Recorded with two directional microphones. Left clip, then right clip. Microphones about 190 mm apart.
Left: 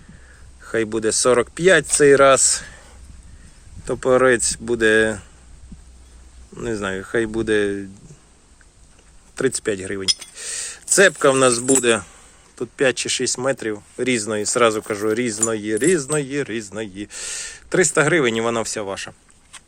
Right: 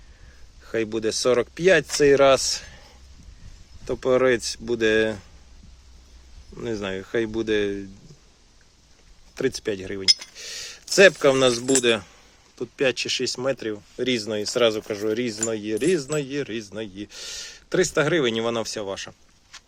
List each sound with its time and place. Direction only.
0.6 s speech: 10° right (ahead or behind)
3.8 s speech: 10° right (ahead or behind)
6.6 s speech: 15° right (ahead or behind)
9.3 s speech: 10° right (ahead or behind)